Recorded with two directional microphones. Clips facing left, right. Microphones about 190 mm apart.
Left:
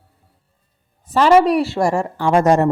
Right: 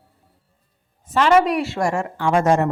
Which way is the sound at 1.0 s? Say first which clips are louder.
Left 3 dB; 35° left (ahead or behind).